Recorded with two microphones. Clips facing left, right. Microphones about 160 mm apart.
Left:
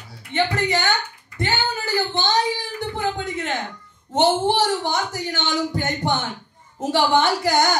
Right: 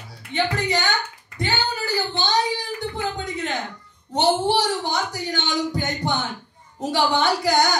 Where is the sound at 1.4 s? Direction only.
45° left (ahead or behind).